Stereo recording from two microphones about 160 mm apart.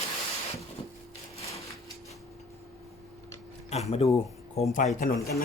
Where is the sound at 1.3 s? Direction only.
40° left (ahead or behind).